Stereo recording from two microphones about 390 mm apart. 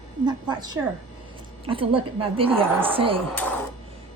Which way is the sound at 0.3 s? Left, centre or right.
Centre.